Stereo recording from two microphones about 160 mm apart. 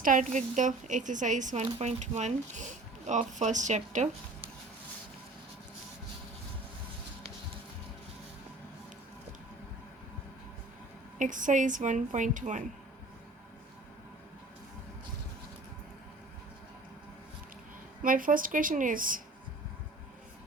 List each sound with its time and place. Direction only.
0.0 s speech: 55° right (ahead or behind)
11.2 s speech: 55° right (ahead or behind)
18.0 s a woman's voice: 60° right (ahead or behind)